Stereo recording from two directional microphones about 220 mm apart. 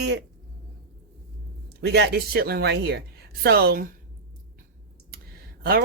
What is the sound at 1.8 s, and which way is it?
Speech, 50° right (ahead or behind).